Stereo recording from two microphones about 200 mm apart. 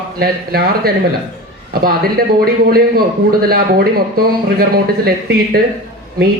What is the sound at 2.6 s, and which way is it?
Speech, 50° right (ahead or behind).